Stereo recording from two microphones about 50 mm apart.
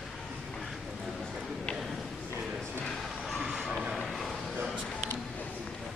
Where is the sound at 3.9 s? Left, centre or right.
Centre.